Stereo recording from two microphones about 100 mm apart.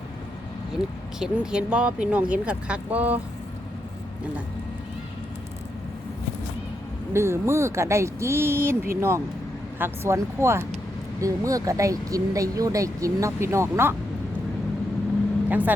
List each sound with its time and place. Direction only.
1.2 s speech: 10° right (ahead or behind)
7.1 s speech: 25° right (ahead or behind)
15.4 s speech: 15° right (ahead or behind)